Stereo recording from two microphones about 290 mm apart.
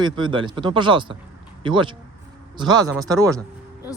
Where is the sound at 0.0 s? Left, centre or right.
Centre.